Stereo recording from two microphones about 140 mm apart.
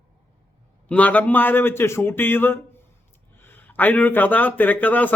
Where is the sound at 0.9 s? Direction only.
10° left (ahead or behind).